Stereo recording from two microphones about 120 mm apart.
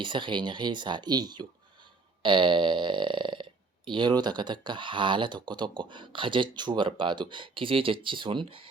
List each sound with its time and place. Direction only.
0.0 s speech: 45° right (ahead or behind)